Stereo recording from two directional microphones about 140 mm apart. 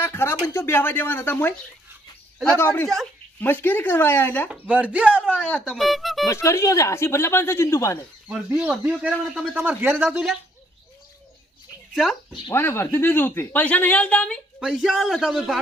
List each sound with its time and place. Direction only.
0.0 s speech: 15° left (ahead or behind)
2.6 s speech: 15° left (ahead or behind)
2.8 s a man's voice: centre (ahead or behind)
3.4 s speech: 15° left (ahead or behind)
4.5 s speech: 10° right (ahead or behind)
5.3 s a man's voice: 10° left (ahead or behind)
6.2 s speech: 20° left (ahead or behind)
8.5 s a man's voice: 5° right (ahead or behind)
12.5 s speech: 15° left (ahead or behind)
14.6 s a man's voice: 5° right (ahead or behind)